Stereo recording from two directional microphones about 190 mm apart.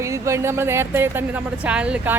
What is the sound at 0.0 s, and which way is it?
Speech, 15° right (ahead or behind).